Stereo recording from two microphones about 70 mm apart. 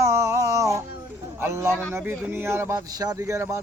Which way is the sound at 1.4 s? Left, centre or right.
Right.